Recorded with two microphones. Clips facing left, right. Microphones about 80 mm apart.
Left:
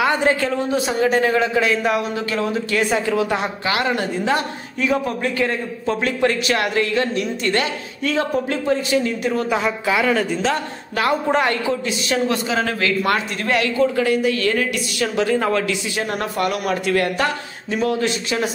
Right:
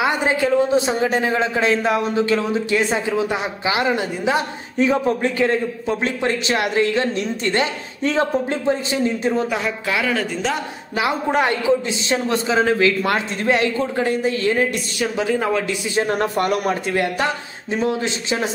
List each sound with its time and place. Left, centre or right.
0.0 s a man's voice: centre
4.7 s a man's voice: right
9.5 s a man's voice: centre
11.0 s a man's voice: centre
15.2 s speech: centre
15.6 s a man's voice: right
16.8 s a man's voice: right